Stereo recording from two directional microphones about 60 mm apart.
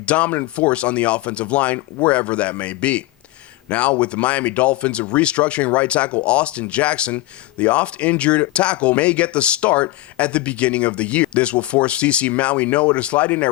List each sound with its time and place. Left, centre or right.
0.0 s speech: left